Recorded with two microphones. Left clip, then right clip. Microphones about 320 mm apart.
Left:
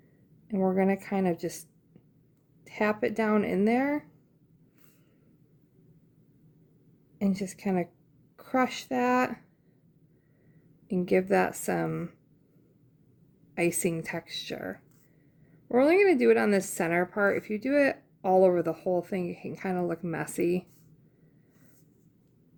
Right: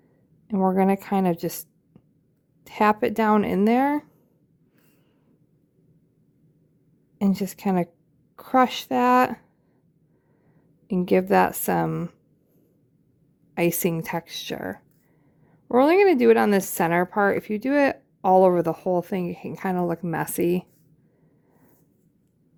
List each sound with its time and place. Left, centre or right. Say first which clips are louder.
0.4 s a woman's voice: right 5 dB; right
7.2 s a woman's voice: right 6 dB; right
10.8 s a woman's voice: right 5 dB; right
13.5 s a woman's voice: right 5 dB; right